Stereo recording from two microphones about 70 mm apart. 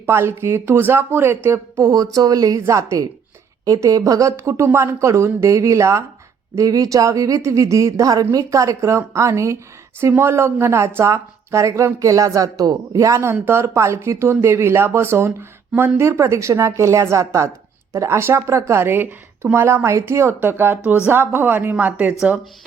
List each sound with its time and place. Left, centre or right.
0.0 s speech: right
1.8 s a woman's voice: right
6.6 s speech: right
8.4 s speech: right
13.4 s speech: right
20.8 s speech: centre
21.1 s speech: right